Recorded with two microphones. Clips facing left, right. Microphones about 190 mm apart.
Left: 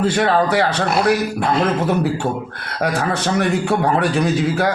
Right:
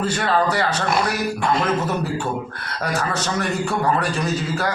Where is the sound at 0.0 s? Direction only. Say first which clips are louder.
Left 4 dB; 65° left (ahead or behind).